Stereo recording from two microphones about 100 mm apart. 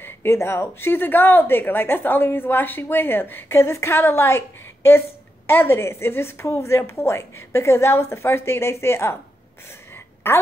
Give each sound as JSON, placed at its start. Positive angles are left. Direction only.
{"t": 0.0, "sound": "a woman's voice", "side_deg": 25}
{"t": 10.3, "sound": "a woman's voice", "side_deg": 25}